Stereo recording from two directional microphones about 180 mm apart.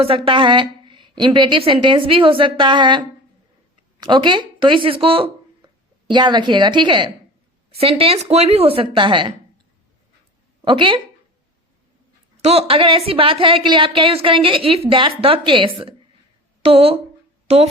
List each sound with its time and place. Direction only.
0.3 s a woman's voice: 25° right (ahead or behind)
4.0 s speech: 25° right (ahead or behind)
10.6 s speech: 25° right (ahead or behind)
12.5 s a woman's voice: 35° right (ahead or behind)